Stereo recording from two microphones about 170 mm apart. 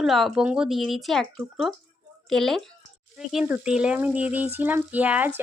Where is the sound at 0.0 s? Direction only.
Centre (ahead or behind).